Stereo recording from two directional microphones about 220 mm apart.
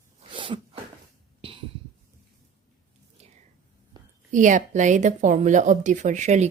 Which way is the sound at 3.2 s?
30° right (ahead or behind).